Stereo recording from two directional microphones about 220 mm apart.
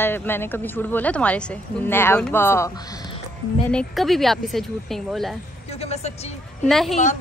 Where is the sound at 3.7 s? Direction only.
Centre (ahead or behind).